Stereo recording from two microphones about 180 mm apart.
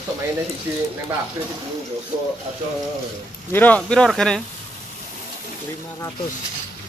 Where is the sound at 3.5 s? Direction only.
10° left (ahead or behind).